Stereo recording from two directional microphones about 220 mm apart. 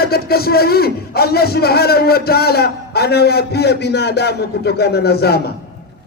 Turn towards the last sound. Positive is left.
turn(degrees=45)  # may be behind; listen again after turning